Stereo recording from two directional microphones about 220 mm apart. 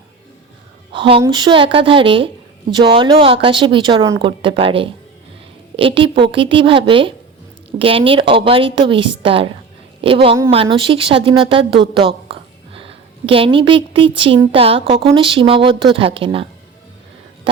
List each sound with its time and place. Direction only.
0.9 s speech: 25° right (ahead or behind)